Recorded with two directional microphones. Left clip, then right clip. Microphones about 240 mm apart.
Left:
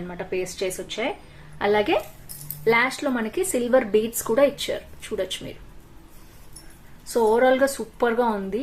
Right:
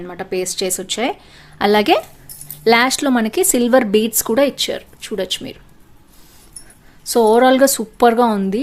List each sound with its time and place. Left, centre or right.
0.1 s speech: right
7.1 s speech: right